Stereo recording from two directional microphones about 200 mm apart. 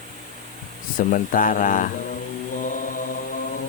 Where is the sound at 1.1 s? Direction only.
40° left (ahead or behind).